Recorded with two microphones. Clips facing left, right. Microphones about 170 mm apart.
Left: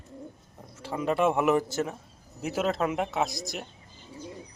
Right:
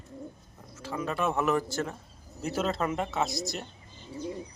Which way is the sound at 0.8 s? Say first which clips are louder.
Left 5 dB; 25° left (ahead or behind).